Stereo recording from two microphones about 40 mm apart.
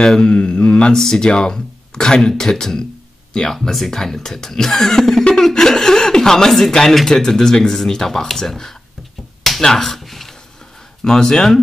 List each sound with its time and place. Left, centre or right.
0.0 s mantra: centre
0.9 s speech: centre
9.9 s a sound: centre
11.1 s speech: centre